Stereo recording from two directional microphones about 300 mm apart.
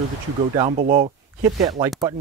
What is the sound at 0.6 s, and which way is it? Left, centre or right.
Speech, right.